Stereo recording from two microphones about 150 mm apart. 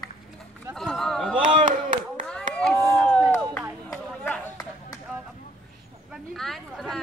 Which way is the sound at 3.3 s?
10° left (ahead or behind).